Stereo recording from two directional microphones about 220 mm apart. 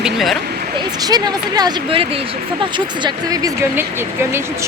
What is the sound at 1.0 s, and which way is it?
Speech, 20° right (ahead or behind).